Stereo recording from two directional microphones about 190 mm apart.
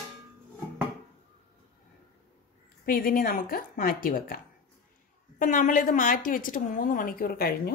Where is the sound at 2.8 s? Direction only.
50° left (ahead or behind).